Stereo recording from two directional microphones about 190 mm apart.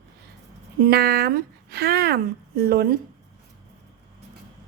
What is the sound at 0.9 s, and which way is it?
Speech, 55° right (ahead or behind).